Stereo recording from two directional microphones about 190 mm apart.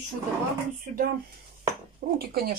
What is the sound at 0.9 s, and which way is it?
Speech, 40° right (ahead or behind).